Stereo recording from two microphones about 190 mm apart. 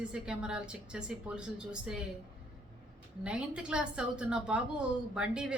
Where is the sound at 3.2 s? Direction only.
5° right (ahead or behind).